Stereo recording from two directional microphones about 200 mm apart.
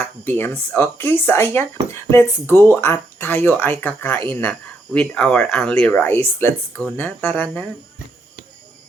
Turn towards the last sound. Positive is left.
turn(degrees=10)  # may be behind; listen again after turning